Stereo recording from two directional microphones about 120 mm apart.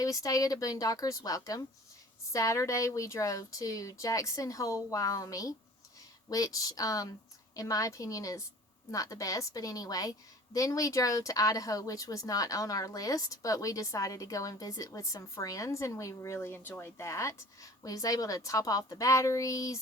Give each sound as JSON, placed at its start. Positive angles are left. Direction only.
{"t": 0.0, "sound": "a woman's voice", "side_deg": 30}